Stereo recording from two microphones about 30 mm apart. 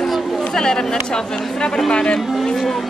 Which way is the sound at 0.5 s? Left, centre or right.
Left.